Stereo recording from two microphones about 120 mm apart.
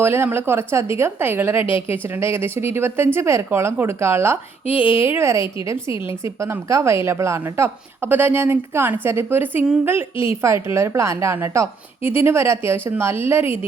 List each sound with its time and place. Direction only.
0.0 s a woman's voice: 20° right (ahead or behind)
5.9 s a woman's voice: 40° left (ahead or behind)
6.2 s a woman's voice: 25° right (ahead or behind)